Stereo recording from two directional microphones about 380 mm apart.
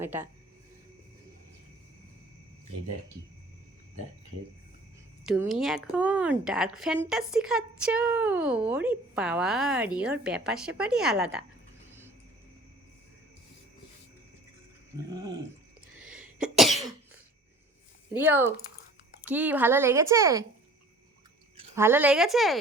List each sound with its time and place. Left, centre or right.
0.0 s a woman's voice: centre
5.2 s a woman's voice: centre
16.0 s cough: centre
18.1 s a woman's voice: centre
21.6 s a woman's voice: centre